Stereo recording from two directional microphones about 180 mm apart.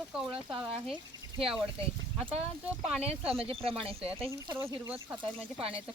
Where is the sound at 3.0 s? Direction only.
35° right (ahead or behind).